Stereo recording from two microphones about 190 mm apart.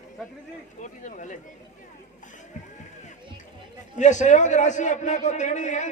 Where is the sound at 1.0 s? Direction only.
40° left (ahead or behind).